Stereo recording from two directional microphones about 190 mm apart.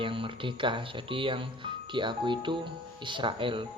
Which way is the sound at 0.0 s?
25° right (ahead or behind).